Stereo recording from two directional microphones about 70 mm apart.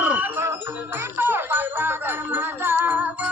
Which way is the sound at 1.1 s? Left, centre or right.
Right.